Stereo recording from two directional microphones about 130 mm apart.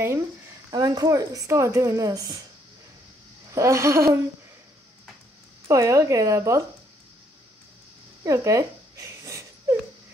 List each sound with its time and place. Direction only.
0.7 s a woman's voice: 30° right (ahead or behind)
3.5 s a woman's voice: 25° right (ahead or behind)
5.7 s a woman's voice: 25° right (ahead or behind)
8.2 s a sound: 25° right (ahead or behind)